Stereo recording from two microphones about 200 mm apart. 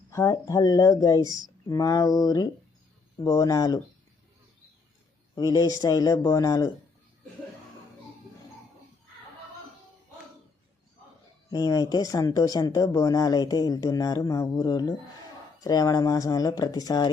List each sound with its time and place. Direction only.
0.1 s speech: 15° left (ahead or behind)
5.3 s speech: 20° left (ahead or behind)
11.5 s speech: 20° left (ahead or behind)